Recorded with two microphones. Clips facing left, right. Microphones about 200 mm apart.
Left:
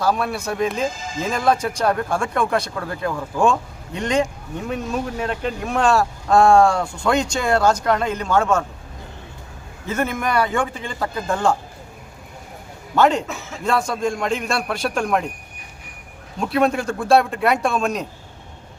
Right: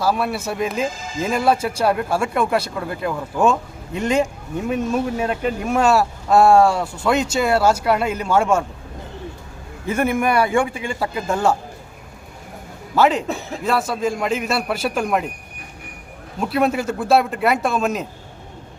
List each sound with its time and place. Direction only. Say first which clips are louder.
0.0 s speech: right 1 dB; 5° right (ahead or behind)
9.8 s speech: right 4 dB; 10° right (ahead or behind)
13.0 s a man's voice: even; 5° right (ahead or behind)
13.2 s speech: right 6 dB; 35° right (ahead or behind)
13.7 s a man's voice: even; 5° right (ahead or behind)
16.4 s a man's voice: even; 5° right (ahead or behind)